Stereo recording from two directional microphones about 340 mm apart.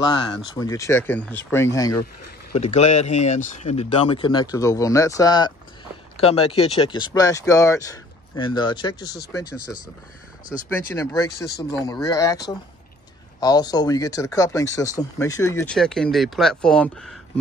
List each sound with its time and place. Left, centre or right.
0.0 s speech: centre
2.6 s speech: centre
10.7 s speech: centre
13.4 s speech: centre